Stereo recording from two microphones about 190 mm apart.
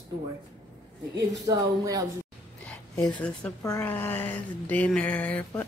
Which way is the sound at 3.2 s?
5° left (ahead or behind).